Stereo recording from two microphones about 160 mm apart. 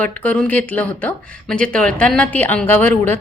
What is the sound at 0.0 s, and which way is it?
Speech, 10° left (ahead or behind).